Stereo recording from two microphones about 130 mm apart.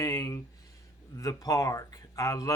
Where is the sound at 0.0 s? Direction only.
25° left (ahead or behind).